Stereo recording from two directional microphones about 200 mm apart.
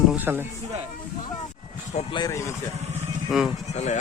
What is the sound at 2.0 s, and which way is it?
Speech, 20° left (ahead or behind).